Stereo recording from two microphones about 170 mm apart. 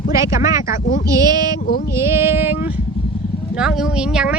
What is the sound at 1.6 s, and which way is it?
Speech, 60° left (ahead or behind).